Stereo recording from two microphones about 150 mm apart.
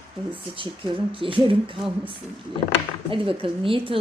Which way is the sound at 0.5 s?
35° right (ahead or behind).